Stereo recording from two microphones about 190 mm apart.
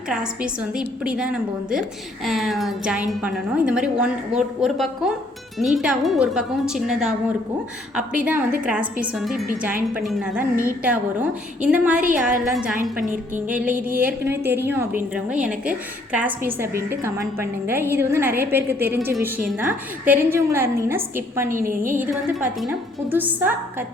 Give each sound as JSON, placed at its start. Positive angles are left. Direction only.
{"t": 0.1, "sound": "a woman's voice", "side_deg": -5}
{"t": 13.9, "sound": "a woman's voice", "side_deg": -10}
{"t": 20.1, "sound": "a woman's voice", "side_deg": -10}
{"t": 23.1, "sound": "a woman's voice", "side_deg": -10}